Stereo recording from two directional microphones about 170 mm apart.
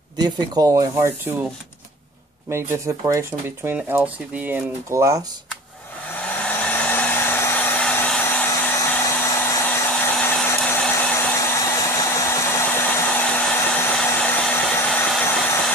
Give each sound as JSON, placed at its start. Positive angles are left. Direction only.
{"t": 0.2, "sound": "speech", "side_deg": -20}
{"t": 2.5, "sound": "speech", "side_deg": -15}
{"t": 6.1, "sound": "hair dryer", "side_deg": 10}